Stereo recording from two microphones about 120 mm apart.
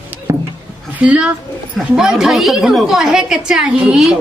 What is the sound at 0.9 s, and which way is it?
A woman's voice, 10° right (ahead or behind).